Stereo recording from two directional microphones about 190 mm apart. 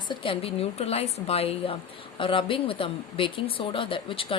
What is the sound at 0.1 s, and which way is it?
Speech, 30° left (ahead or behind).